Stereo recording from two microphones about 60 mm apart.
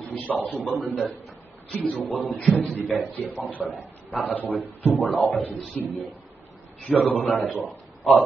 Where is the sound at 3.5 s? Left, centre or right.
Left.